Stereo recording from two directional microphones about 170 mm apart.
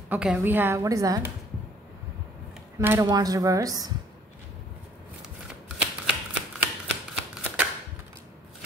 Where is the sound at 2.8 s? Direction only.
15° right (ahead or behind).